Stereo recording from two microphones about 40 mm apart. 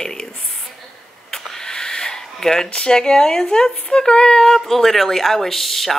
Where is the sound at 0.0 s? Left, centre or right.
Centre.